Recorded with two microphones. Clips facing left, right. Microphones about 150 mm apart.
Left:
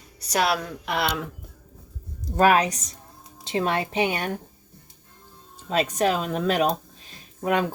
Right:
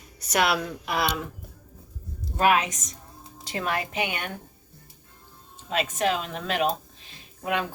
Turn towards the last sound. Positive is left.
turn(degrees=40)  # may be behind; listen again after turning